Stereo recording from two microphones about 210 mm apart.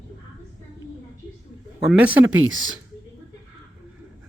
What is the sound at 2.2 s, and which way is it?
Speech, 70° right (ahead or behind).